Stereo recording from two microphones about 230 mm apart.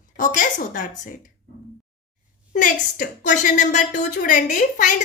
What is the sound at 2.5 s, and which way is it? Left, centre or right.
A woman's voice, left.